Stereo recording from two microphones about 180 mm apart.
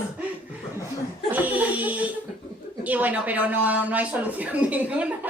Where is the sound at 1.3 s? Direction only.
10° right (ahead or behind).